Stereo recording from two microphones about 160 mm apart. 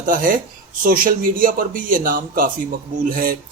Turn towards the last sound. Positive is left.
turn(degrees=-60)  # may be behind; listen again after turning